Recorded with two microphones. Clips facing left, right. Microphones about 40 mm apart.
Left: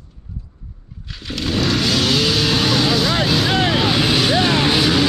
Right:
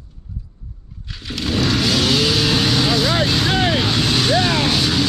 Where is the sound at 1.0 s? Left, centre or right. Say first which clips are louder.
Even; centre.